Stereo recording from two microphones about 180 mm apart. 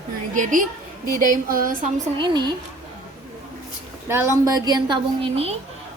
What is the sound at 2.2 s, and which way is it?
Speech, 25° right (ahead or behind).